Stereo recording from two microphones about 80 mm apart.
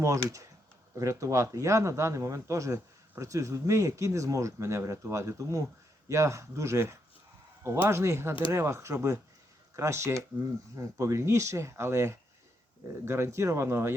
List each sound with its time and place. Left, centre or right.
0.0 s speech: right